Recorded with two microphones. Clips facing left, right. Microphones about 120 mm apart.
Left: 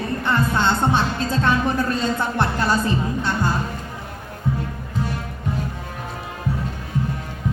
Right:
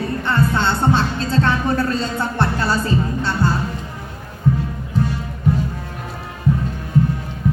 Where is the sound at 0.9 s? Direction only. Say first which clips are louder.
Right 2 dB; 15° left (ahead or behind).